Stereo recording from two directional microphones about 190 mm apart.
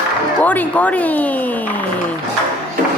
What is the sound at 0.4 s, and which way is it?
Speech, 10° left (ahead or behind).